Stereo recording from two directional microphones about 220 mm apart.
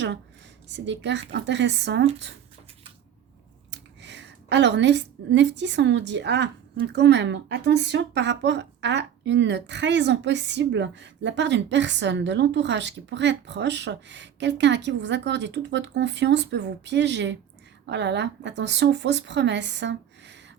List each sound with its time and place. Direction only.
0.7 s a woman's voice: 50° right (ahead or behind)
3.7 s a woman's voice: 50° right (ahead or behind)